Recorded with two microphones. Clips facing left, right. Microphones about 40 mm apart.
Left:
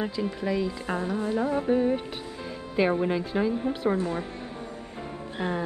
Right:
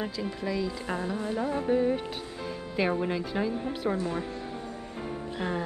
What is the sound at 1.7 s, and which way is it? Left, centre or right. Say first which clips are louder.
A woman's voice: right 1 dB; centre.